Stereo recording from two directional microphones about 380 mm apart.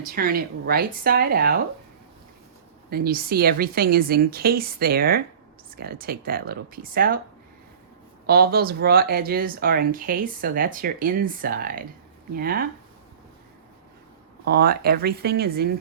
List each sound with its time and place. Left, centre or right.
0.1 s speech: right
2.9 s speech: right
8.3 s speech: right
14.5 s speech: right